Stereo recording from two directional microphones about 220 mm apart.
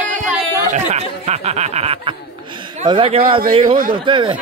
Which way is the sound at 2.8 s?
25° right (ahead or behind).